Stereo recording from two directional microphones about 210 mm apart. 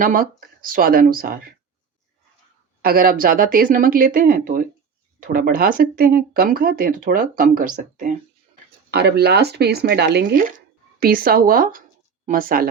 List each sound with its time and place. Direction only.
0.0 s speech: 40° right (ahead or behind)
2.8 s speech: 45° right (ahead or behind)
8.9 s speech: 50° right (ahead or behind)